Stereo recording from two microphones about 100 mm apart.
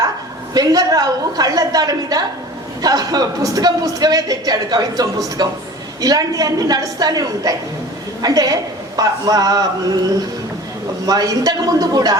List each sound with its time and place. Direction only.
0.5 s a man's voice: 40° right (ahead or behind)
11.0 s a man's voice: 40° right (ahead or behind)